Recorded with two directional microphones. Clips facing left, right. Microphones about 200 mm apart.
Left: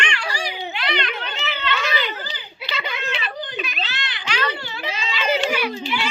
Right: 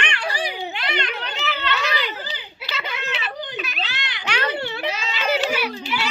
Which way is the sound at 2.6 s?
5° right (ahead or behind).